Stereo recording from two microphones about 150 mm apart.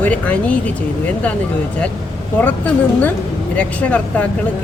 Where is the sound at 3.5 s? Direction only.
10° left (ahead or behind).